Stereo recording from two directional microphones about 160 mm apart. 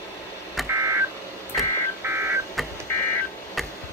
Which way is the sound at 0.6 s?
Centre (ahead or behind).